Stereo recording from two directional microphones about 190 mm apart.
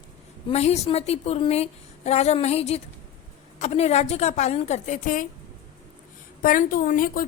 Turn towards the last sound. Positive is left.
turn(degrees=50)  # may be behind; listen again after turning